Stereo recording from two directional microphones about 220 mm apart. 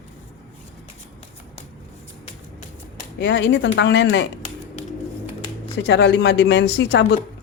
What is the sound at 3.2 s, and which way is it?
Speech, 50° left (ahead or behind).